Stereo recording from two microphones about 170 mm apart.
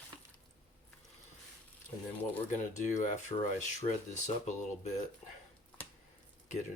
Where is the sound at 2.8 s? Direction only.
45° left (ahead or behind).